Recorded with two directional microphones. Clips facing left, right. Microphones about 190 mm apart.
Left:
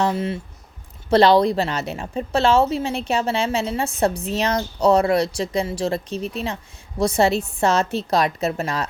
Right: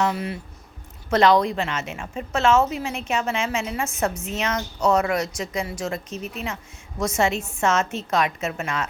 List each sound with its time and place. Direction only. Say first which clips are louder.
0.0 s a woman's voice: left 3 dB; 25° left (ahead or behind)